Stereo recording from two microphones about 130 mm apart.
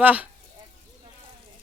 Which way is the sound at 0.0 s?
10° right (ahead or behind).